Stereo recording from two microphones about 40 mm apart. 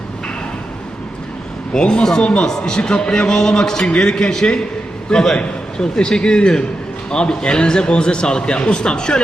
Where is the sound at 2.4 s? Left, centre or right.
Centre.